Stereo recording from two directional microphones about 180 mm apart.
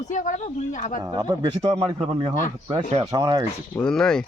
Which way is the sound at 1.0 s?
20° right (ahead or behind).